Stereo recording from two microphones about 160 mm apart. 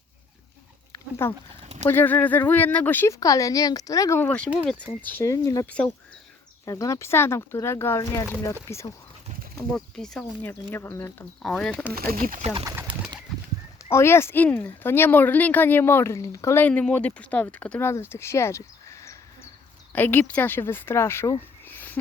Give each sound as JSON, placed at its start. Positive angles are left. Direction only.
{"t": 1.2, "sound": "speech", "side_deg": 15}
{"t": 6.7, "sound": "speech", "side_deg": 20}
{"t": 9.7, "sound": "speech", "side_deg": 5}
{"t": 11.4, "sound": "speech", "side_deg": 5}
{"t": 11.9, "sound": "speech", "side_deg": -65}
{"t": 13.9, "sound": "speech", "side_deg": 15}